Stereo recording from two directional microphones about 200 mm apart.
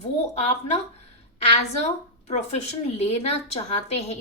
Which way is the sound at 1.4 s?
30° left (ahead or behind).